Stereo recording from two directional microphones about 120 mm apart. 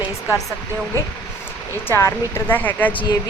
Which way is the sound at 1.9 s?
20° left (ahead or behind).